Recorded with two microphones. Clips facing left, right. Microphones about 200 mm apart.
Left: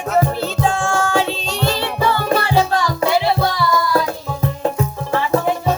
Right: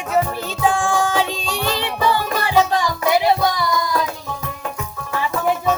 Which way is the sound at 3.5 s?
15° right (ahead or behind).